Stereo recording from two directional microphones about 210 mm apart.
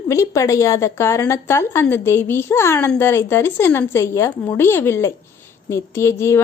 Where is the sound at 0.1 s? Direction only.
15° left (ahead or behind).